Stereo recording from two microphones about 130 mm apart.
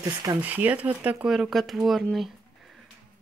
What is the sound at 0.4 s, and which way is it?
Speech, 15° right (ahead or behind).